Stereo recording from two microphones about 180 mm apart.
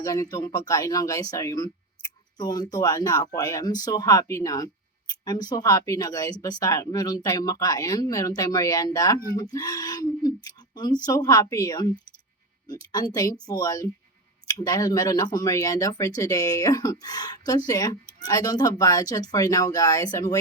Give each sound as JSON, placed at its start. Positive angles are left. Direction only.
{"t": 0.0, "sound": "speech", "side_deg": 20}